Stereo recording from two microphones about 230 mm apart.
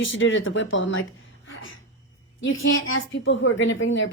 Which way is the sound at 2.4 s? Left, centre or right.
Left.